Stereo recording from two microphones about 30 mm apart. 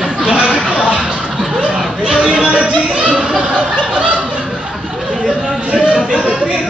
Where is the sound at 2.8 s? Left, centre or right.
Right.